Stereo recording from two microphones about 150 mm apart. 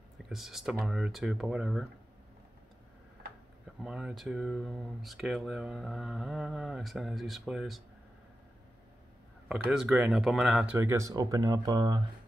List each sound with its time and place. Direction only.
0.2 s speech: centre (ahead or behind)
3.8 s speech: 5° right (ahead or behind)
9.7 s speech: 5° right (ahead or behind); by 12.0 s 30° right (ahead or behind)